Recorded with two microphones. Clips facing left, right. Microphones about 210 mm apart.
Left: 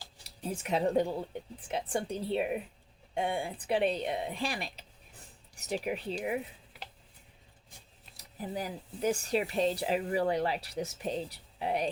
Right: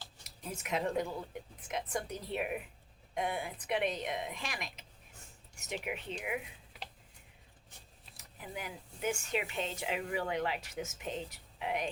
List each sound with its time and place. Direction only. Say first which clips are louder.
0.2 s speech: left 7 dB; 35° left (ahead or behind)
8.1 s speech: left 7 dB; 35° left (ahead or behind)